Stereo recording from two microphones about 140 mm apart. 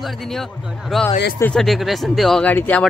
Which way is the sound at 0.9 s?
Centre (ahead or behind).